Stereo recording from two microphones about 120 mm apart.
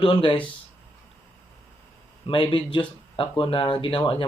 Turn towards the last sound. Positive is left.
turn(degrees=45)  # may be behind; listen again after turning